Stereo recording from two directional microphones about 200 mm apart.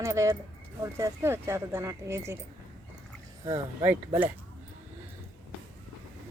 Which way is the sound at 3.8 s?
10° right (ahead or behind).